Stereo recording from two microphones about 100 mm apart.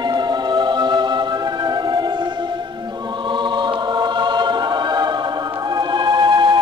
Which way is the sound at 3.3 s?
50° right (ahead or behind).